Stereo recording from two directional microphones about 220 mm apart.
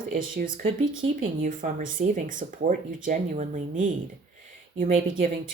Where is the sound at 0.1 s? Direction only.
40° right (ahead or behind).